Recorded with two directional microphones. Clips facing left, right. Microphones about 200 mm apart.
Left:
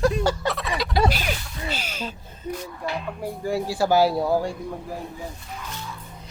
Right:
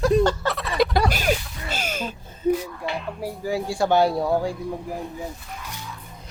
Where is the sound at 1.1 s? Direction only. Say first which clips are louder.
Right 3 dB; 45° right (ahead or behind).